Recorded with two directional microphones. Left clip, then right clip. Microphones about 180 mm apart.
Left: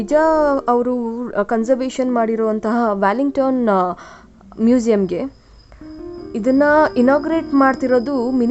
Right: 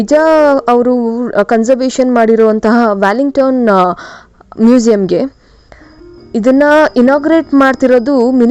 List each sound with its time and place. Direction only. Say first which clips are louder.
0.0 s a woman's voice: right 7 dB; 30° right (ahead or behind)
6.3 s a woman's voice: right 6 dB; 35° right (ahead or behind)